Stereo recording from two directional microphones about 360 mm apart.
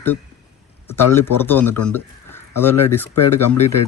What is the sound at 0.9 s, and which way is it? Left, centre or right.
Speech, centre.